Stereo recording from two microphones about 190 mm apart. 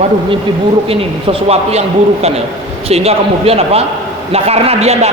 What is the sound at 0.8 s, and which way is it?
A man's voice, 30° right (ahead or behind).